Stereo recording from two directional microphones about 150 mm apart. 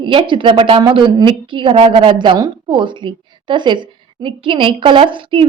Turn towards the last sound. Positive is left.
turn(degrees=-35)  # may be behind; listen again after turning